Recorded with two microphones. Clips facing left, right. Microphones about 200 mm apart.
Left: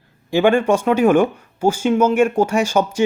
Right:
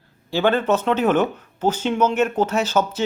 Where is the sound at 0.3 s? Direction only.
15° left (ahead or behind).